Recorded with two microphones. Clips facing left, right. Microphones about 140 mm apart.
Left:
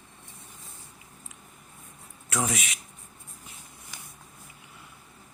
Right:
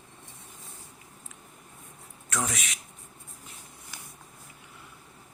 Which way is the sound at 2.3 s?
5° left (ahead or behind).